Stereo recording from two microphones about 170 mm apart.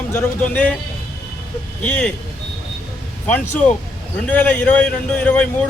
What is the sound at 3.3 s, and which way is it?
A man's voice, 10° left (ahead or behind).